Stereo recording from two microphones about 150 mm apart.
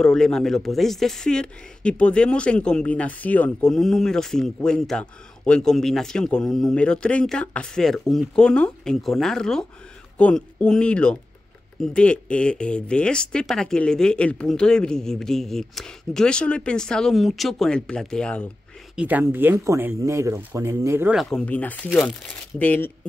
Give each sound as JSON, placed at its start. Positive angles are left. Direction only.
{"t": 0.0, "sound": "speech", "side_deg": 5}
{"t": 18.9, "sound": "speech", "side_deg": -10}
{"t": 21.1, "sound": "speech", "side_deg": 0}